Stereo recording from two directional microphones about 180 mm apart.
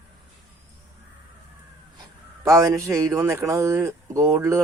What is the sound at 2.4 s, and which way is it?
A man's voice, 15° right (ahead or behind).